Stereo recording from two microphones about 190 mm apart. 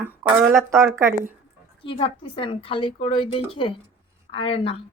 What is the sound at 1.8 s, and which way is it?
A woman's voice, 30° left (ahead or behind).